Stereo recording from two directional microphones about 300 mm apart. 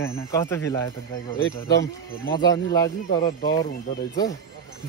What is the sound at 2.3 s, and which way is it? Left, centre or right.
Speech, centre.